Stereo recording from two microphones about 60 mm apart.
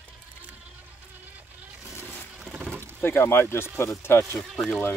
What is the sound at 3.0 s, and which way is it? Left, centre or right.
Speech, left.